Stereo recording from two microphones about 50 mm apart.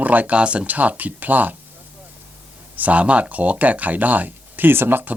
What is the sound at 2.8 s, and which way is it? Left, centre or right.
Speech, right.